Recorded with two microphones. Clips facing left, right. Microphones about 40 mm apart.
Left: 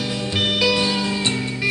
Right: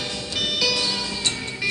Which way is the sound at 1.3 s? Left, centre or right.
Centre.